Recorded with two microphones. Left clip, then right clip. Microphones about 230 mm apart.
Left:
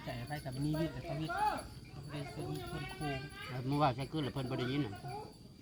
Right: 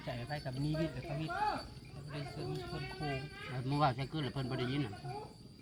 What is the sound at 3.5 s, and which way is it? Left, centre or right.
Speech, centre.